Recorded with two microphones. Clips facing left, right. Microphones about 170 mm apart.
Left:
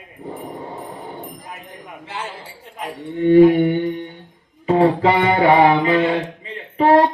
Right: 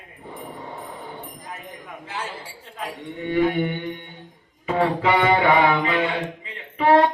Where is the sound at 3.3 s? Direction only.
35° left (ahead or behind).